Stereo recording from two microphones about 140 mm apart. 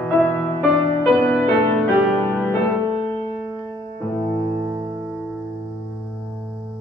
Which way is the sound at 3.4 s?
15° right (ahead or behind).